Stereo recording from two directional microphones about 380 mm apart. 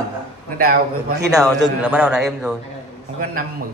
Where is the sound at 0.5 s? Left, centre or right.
Right.